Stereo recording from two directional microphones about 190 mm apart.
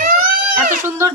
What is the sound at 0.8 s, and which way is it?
Speech, 10° right (ahead or behind).